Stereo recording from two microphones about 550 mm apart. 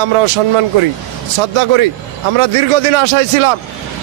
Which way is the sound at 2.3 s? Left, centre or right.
Right.